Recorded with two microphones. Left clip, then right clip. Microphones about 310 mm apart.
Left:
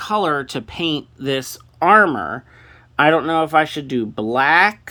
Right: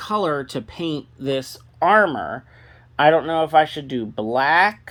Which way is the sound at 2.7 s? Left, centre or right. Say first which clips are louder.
Left 1 dB; centre.